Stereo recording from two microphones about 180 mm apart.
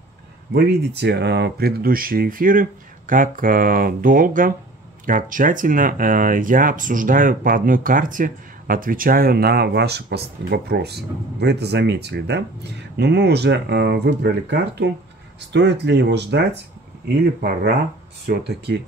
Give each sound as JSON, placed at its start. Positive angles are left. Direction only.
{"t": 0.5, "sound": "speech", "side_deg": -65}